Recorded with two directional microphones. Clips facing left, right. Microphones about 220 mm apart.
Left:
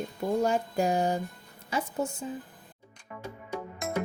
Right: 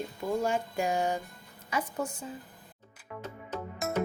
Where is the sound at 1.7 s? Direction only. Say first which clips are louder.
Left 2 dB; 25° left (ahead or behind).